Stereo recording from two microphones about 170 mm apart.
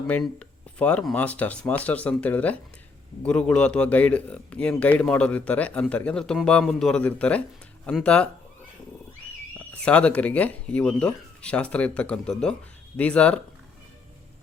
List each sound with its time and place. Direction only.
0.1 s speech: 5° left (ahead or behind)
9.8 s speech: 5° left (ahead or behind)